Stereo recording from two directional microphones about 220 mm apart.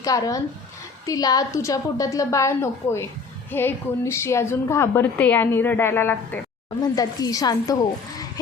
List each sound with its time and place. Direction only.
0.0 s a woman's voice: 15° left (ahead or behind)